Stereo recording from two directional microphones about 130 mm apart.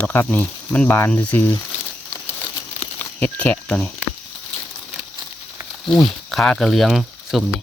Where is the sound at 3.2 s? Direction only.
10° left (ahead or behind).